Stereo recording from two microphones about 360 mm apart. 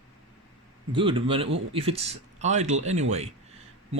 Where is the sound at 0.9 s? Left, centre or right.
Centre.